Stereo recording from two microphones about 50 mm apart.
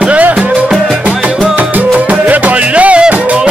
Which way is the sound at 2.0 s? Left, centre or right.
Right.